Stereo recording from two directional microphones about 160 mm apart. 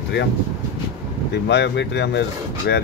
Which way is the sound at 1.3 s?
90° left.